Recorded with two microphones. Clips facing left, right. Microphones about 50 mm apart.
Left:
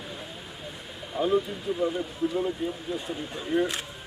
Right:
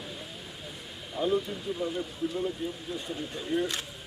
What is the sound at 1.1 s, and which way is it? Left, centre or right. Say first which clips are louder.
Speech: left 3 dB; centre.